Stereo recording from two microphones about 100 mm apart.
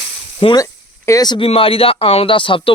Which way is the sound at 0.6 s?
35° left (ahead or behind).